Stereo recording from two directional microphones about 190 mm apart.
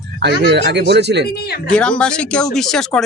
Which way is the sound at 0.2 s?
65° right (ahead or behind).